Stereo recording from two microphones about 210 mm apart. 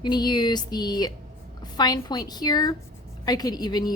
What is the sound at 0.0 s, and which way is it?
A woman's voice, 20° left (ahead or behind).